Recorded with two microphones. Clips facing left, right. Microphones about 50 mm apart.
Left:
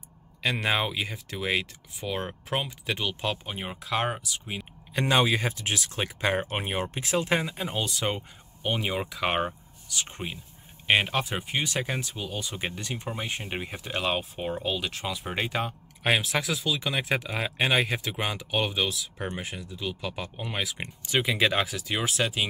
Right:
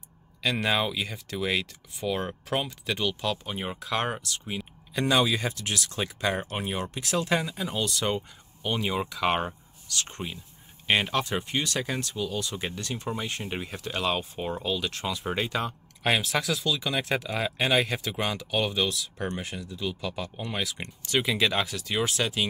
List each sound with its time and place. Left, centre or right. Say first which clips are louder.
0.4 s speech: even; centre
4.9 s speech: even; left; by 22.5 s centre